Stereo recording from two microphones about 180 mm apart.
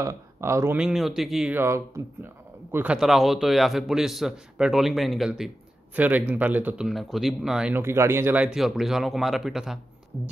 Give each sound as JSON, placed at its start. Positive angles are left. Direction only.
{"t": 0.0, "sound": "speech", "side_deg": -15}
{"t": 0.7, "sound": "speech", "side_deg": 0}